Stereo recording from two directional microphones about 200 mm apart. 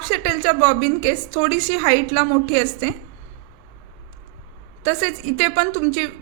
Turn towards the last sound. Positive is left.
turn(degrees=-40)  # may be behind; listen again after turning